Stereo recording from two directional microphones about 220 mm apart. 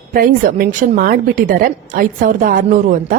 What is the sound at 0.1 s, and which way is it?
A woman's voice, 40° right (ahead or behind).